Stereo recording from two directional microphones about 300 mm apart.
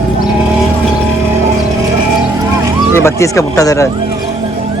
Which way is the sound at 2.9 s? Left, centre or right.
Centre.